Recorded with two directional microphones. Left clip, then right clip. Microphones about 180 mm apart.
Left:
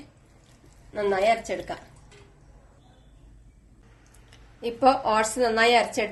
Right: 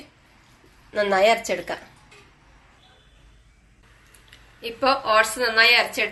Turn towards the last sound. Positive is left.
turn(degrees=60)  # may be behind; listen again after turning